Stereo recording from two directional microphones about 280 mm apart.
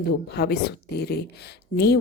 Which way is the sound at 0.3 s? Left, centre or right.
Left.